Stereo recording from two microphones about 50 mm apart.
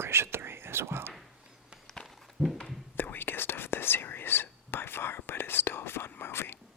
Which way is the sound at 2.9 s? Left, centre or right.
Left.